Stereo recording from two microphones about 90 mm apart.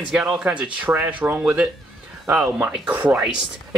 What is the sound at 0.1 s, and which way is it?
Speech, 10° right (ahead or behind).